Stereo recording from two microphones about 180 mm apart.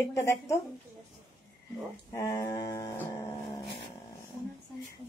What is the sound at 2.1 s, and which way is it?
Speech, 20° left (ahead or behind).